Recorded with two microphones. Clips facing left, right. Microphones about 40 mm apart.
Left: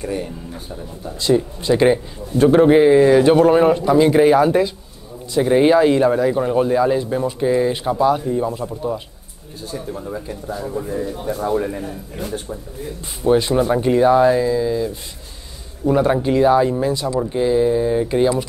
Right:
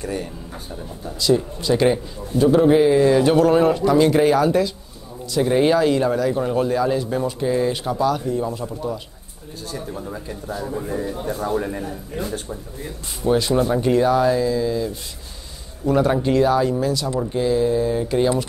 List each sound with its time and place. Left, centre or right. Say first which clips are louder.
0.0 s speech: left 2 dB; centre
1.2 s speech: left 2 dB; left
2.3 s a man's voice: left 3 dB; left
2.6 s speech: left 5 dB; left
9.8 s speech: left 4 dB; centre
11.4 s speech: left 3 dB; centre
13.2 s speech: left 3 dB; centre